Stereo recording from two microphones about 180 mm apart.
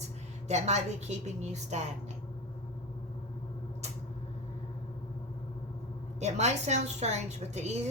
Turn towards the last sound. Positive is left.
turn(degrees=-40)  # may be behind; listen again after turning